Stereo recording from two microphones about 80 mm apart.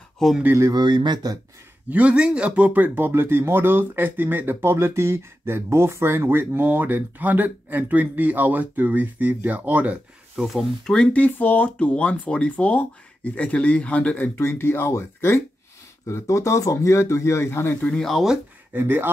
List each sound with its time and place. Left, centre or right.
0.2 s speech: centre
0.7 s speech: right
1.9 s speech: centre
10.3 s speech: centre
10.8 s speech: centre; by 17.7 s left
17.8 s speech: centre
18.7 s speech: right